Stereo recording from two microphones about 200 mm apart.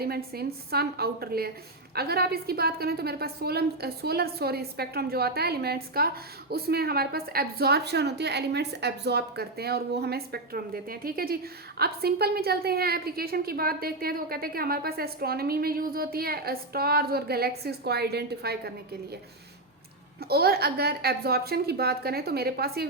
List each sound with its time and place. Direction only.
0.0 s a woman's voice: 50° right (ahead or behind)
20.1 s a woman's voice: 50° right (ahead or behind)